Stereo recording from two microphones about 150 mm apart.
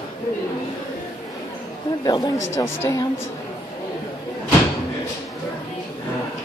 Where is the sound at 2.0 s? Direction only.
25° left (ahead or behind).